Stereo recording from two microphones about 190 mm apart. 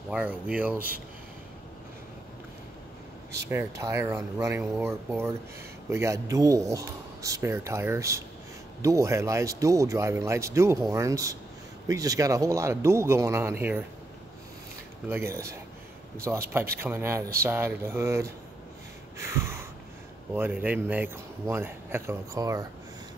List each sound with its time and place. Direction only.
0.1 s speech: 5° right (ahead or behind)
3.4 s speech: 15° right (ahead or behind)
15.0 s speech: 15° right (ahead or behind)
19.1 s snort: 15° right (ahead or behind)
20.3 s speech: 10° right (ahead or behind)